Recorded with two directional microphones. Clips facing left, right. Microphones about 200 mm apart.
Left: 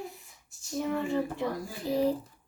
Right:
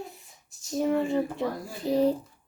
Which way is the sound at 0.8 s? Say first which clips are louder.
Right 5 dB; 35° right (ahead or behind).